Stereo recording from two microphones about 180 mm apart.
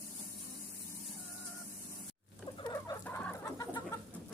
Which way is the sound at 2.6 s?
20° left (ahead or behind).